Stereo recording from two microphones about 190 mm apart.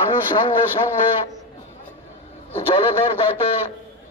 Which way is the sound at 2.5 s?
30° left (ahead or behind).